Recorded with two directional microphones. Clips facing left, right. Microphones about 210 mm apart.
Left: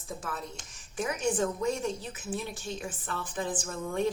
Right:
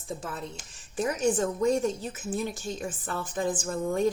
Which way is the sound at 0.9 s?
40° right (ahead or behind).